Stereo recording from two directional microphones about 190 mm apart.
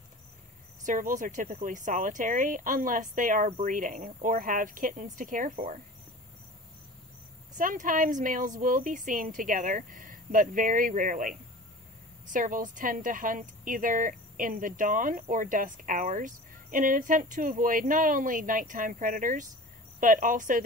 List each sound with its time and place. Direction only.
0.8 s speech: 45° right (ahead or behind)
7.5 s speech: 45° right (ahead or behind)